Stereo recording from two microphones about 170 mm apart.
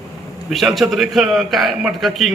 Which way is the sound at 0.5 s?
Centre (ahead or behind).